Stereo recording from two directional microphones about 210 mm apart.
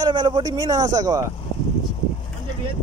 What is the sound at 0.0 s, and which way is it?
Speech, 20° right (ahead or behind).